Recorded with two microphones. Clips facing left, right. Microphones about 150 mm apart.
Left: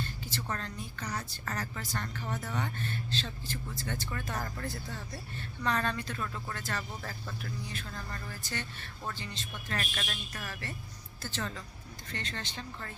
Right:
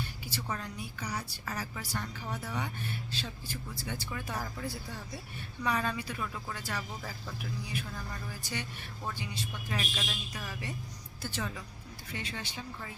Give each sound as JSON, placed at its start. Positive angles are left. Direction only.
{"t": 0.0, "sound": "a woman's voice", "side_deg": -10}